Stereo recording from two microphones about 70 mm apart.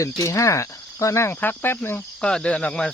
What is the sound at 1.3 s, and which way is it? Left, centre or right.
Speech, left.